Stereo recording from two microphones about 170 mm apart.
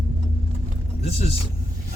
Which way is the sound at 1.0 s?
35° left (ahead or behind).